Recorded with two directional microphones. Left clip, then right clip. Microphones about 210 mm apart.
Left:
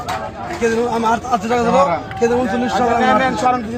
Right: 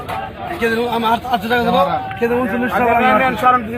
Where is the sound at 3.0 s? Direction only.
25° left (ahead or behind).